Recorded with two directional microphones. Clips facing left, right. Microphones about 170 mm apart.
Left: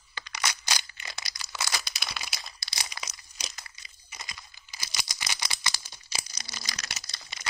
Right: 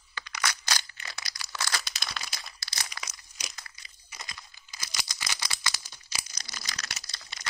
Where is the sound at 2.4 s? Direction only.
15° left (ahead or behind).